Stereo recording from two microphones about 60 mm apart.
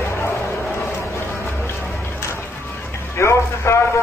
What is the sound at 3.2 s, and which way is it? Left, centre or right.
Music, left.